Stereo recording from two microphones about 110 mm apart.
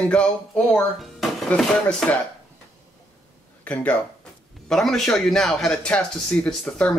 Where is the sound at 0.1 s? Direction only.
10° left (ahead or behind).